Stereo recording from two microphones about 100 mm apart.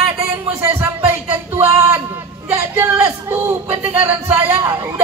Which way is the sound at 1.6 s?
30° right (ahead or behind).